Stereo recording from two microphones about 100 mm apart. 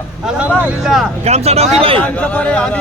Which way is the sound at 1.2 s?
90° right.